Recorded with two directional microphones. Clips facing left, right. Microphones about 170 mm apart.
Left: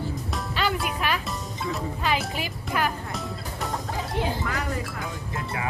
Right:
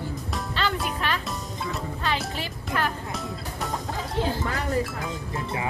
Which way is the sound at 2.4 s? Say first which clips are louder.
Left 1 dB; 10° left (ahead or behind).